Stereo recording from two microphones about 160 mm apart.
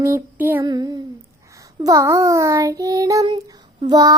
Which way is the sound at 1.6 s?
20° right (ahead or behind).